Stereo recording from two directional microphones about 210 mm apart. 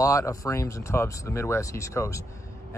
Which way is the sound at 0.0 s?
15° left (ahead or behind).